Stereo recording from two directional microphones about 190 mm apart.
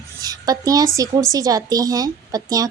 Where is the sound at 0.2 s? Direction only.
20° right (ahead or behind).